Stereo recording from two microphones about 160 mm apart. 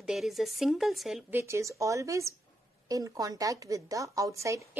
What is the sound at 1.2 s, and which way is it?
A woman's voice, 15° right (ahead or behind).